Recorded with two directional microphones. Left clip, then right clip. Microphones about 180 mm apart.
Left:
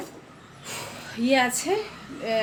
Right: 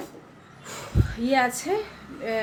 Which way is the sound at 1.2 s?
15° left (ahead or behind).